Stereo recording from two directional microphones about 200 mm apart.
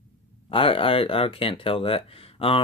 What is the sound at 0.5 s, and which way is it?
Speech, 25° left (ahead or behind).